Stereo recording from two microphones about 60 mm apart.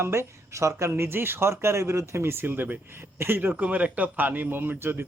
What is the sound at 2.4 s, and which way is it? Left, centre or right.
A man's voice, right.